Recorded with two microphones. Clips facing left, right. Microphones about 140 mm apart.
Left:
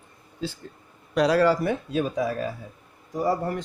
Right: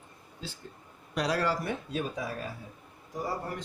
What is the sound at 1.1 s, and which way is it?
Speech, 90° left.